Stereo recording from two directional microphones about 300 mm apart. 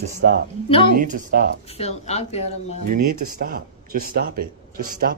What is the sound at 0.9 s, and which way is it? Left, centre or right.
Speech, right.